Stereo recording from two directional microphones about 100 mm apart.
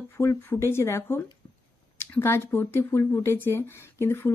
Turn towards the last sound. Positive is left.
turn(degrees=25)  # may be behind; listen again after turning